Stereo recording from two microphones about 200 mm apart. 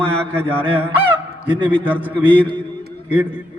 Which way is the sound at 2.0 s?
10° right (ahead or behind).